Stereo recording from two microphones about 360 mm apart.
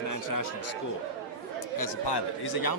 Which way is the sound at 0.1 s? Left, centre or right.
Left.